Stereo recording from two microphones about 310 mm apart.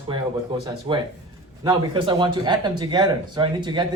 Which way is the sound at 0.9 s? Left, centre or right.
Centre.